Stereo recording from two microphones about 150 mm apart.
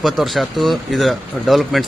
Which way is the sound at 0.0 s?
Centre (ahead or behind).